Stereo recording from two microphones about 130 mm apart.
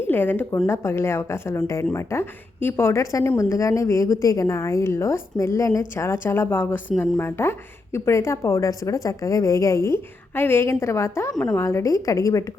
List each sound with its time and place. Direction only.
0.0 s speech: 15° left (ahead or behind)
11.3 s a woman's voice: 5° left (ahead or behind)
11.6 s speech: 25° left (ahead or behind)